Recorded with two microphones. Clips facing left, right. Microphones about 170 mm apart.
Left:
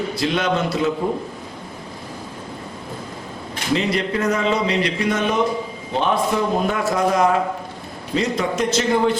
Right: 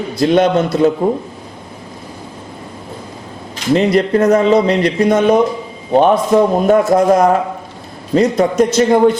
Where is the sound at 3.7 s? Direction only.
45° right (ahead or behind).